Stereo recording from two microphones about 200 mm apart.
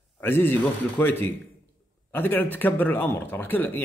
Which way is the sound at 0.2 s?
10° left (ahead or behind).